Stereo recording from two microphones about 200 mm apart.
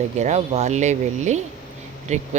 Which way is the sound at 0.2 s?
35° right (ahead or behind).